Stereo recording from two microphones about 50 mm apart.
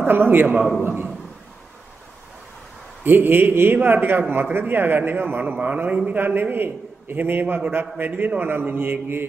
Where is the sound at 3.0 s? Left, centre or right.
Right.